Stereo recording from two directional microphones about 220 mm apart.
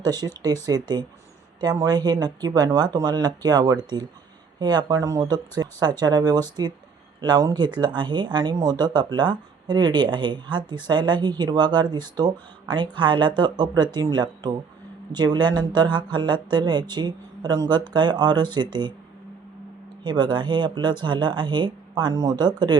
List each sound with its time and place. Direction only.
0.0 s speech: 20° right (ahead or behind)
20.1 s speech: 20° right (ahead or behind)